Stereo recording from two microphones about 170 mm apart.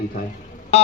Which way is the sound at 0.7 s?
35° left (ahead or behind).